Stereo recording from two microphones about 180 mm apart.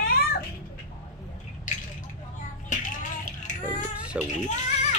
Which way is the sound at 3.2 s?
45° left (ahead or behind).